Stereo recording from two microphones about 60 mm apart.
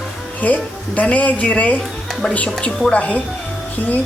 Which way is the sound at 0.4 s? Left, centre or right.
Left.